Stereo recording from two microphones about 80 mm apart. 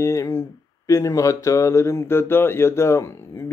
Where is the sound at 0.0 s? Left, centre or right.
Left.